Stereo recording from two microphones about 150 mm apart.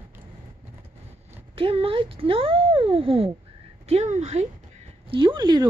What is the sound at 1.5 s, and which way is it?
A woman's voice, 40° right (ahead or behind).